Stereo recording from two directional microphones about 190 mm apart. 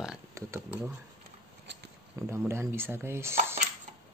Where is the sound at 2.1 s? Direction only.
15° right (ahead or behind).